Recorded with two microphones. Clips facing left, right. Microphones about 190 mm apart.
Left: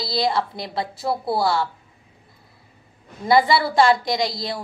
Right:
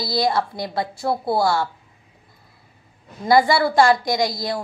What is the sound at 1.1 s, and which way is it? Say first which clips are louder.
Speech: right 2 dB; 25° right (ahead or behind).